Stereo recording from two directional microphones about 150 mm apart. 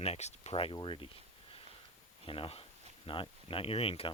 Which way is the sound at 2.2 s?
35° left (ahead or behind).